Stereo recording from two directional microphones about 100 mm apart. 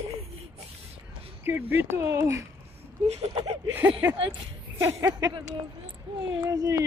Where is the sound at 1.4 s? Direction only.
20° right (ahead or behind).